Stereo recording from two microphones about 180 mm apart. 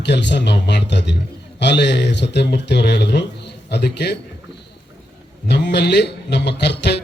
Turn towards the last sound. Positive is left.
turn(degrees=70)  # may be behind; listen again after turning